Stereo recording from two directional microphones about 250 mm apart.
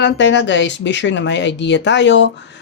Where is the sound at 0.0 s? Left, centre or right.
Left.